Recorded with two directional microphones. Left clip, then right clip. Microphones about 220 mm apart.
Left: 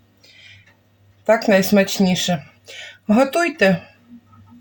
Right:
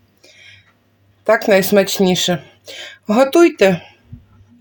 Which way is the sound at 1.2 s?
40° right (ahead or behind).